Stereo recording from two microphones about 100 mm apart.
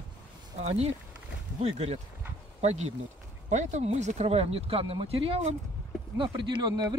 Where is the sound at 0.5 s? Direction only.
90° right; by 5.5 s 75° right (ahead or behind).